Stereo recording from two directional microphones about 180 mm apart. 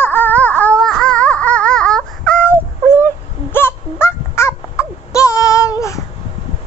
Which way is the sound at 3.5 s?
10° left (ahead or behind).